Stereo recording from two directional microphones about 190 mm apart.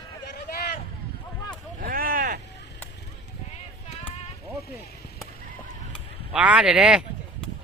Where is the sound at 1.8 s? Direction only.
50° right (ahead or behind).